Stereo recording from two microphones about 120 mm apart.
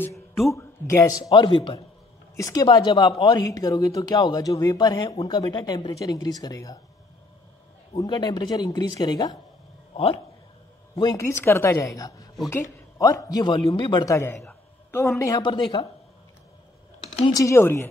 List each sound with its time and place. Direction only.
0.0 s a sound: 20° left (ahead or behind)
0.5 s speech: 25° left (ahead or behind); by 1.8 s 40° left (ahead or behind)
2.3 s speech: 30° left (ahead or behind)
8.0 s speech: 35° left (ahead or behind)
11.0 s speech: 35° left (ahead or behind)
11.2 s speech: 20° left (ahead or behind); by 15.9 s 40° left (ahead or behind)
17.3 s speech: 25° left (ahead or behind)